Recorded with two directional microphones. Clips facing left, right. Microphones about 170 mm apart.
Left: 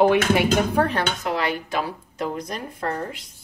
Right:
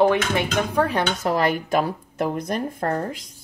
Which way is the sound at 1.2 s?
45° right (ahead or behind).